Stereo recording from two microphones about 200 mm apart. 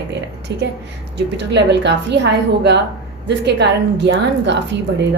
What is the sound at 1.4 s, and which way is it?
Speech, 60° right (ahead or behind).